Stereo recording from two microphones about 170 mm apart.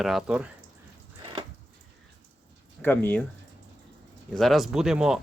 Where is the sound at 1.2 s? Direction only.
25° right (ahead or behind).